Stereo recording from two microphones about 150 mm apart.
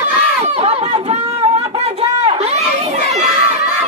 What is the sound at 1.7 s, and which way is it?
Crowd, 45° right (ahead or behind).